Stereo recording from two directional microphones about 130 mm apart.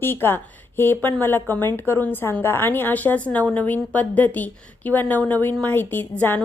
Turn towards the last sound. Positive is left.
turn(degrees=15)  # may be behind; listen again after turning